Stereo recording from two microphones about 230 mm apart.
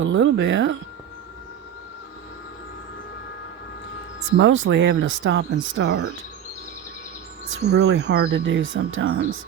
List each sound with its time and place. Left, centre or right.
0.0 s speech: right
4.4 s speech: right
7.5 s speech: right